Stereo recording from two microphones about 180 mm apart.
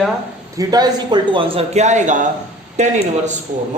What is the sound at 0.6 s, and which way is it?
A man's voice, 20° right (ahead or behind).